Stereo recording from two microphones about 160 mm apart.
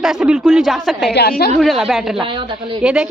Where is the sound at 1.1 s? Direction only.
90° left.